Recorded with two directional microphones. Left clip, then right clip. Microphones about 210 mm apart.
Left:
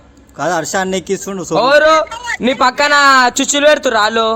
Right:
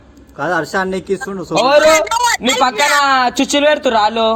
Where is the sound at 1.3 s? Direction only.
45° left (ahead or behind).